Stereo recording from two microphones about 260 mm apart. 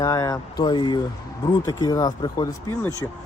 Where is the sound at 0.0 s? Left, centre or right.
Centre.